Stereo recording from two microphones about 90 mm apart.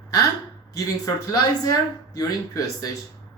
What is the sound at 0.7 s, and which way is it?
Speech, 40° left (ahead or behind).